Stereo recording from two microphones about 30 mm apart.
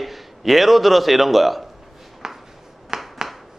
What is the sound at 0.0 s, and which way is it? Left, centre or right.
A man's voice, centre.